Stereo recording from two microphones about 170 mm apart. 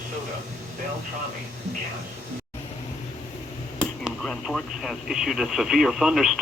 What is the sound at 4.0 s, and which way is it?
Speech, centre (ahead or behind).